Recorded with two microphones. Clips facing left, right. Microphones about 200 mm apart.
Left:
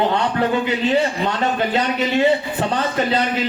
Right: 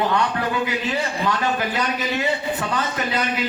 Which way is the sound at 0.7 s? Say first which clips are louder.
Left 6 dB; 25° left (ahead or behind).